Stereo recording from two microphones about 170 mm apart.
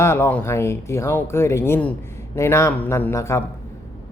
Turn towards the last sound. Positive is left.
turn(degrees=15)  # may be behind; listen again after turning